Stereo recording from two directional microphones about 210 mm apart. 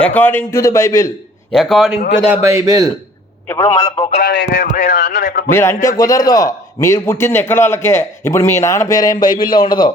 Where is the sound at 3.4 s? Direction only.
15° left (ahead or behind).